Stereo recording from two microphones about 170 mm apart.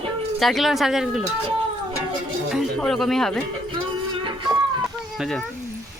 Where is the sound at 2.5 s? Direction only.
Centre (ahead or behind).